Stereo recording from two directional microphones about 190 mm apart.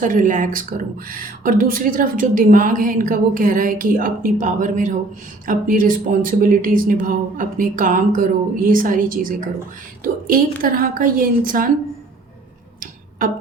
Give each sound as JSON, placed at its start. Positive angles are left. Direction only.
{"t": 0.0, "sound": "speech", "side_deg": -45}
{"t": 12.8, "sound": "tick-tock", "side_deg": -45}